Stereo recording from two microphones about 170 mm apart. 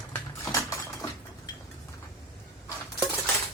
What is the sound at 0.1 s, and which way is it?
Typing, 15° left (ahead or behind).